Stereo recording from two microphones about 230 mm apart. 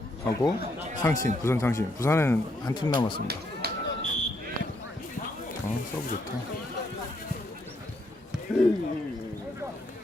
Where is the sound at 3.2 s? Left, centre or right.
Right.